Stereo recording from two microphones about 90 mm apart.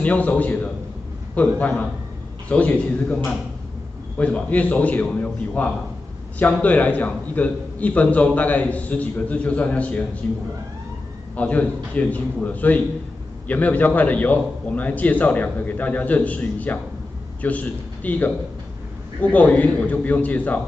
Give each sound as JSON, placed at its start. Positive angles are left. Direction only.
{"t": 0.0, "sound": "a man's voice", "side_deg": 15}
{"t": 11.3, "sound": "a man's voice", "side_deg": 15}